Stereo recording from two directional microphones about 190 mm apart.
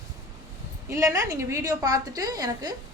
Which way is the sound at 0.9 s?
15° right (ahead or behind).